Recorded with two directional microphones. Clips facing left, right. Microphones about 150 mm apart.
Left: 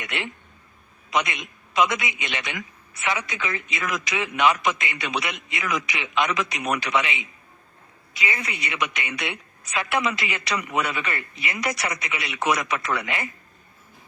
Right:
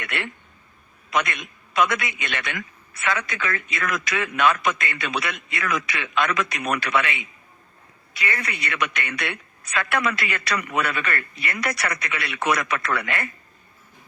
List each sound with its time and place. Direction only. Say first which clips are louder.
0.0 s a man's voice: right 1 dB; 20° left (ahead or behind)